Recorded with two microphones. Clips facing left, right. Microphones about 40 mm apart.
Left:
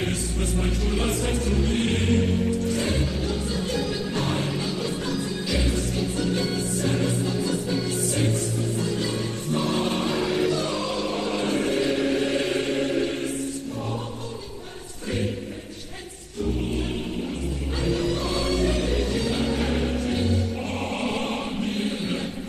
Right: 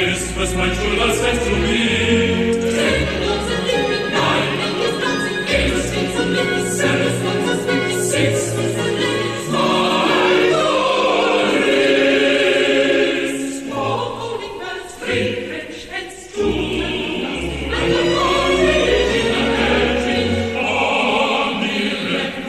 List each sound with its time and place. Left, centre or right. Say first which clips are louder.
0.0 s music: right 8 dB; right
15.0 s choir: right 8 dB; right
16.3 s music: right 8 dB; right